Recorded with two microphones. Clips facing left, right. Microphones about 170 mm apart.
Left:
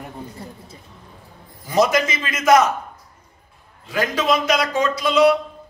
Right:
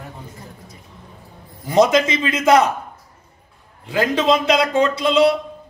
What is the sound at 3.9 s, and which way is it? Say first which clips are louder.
A man's voice: right 3 dB; 25° right (ahead or behind).